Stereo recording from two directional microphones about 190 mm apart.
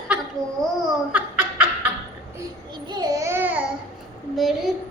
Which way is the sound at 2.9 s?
20° right (ahead or behind).